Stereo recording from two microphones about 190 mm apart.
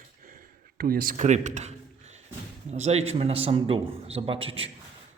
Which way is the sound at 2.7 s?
35° right (ahead or behind).